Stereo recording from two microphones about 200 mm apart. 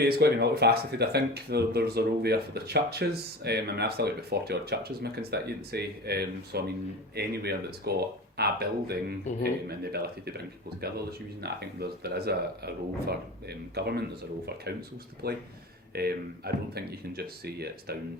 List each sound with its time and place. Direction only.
0.0 s speech: 55° right (ahead or behind)